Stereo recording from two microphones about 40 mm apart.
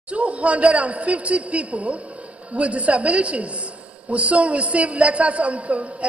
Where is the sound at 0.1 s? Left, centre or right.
Right.